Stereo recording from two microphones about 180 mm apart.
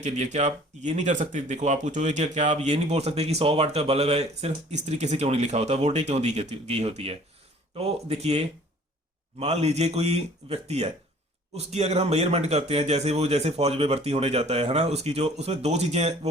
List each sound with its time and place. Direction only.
0.0 s speech: 40° right (ahead or behind)